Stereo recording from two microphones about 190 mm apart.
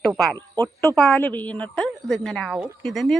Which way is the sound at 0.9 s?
5° left (ahead or behind).